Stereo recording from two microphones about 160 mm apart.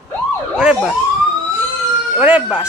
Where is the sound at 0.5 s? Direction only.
5° right (ahead or behind).